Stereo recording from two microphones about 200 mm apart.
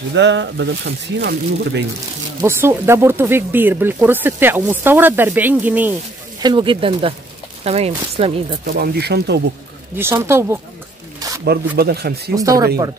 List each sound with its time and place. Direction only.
0.1 s speech: 65° right (ahead or behind)
2.4 s speech: 10° right (ahead or behind)
6.4 s speech: 25° right (ahead or behind)
8.6 s speech: 50° right (ahead or behind)
9.9 s speech: 10° right (ahead or behind)
11.7 s speech: 50° right (ahead or behind)
12.4 s speech: 15° right (ahead or behind)